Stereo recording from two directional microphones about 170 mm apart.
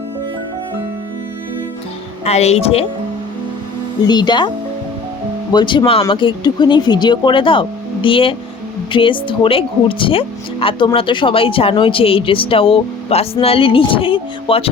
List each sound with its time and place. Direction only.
2.2 s speech: 40° left (ahead or behind)
4.0 s speech: 25° left (ahead or behind)